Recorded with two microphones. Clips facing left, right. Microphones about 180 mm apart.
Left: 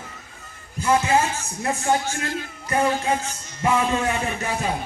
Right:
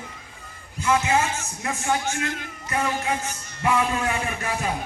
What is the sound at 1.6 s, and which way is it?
Speech, 35° left (ahead or behind).